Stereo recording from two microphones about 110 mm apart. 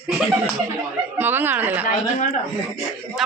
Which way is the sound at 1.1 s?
20° right (ahead or behind).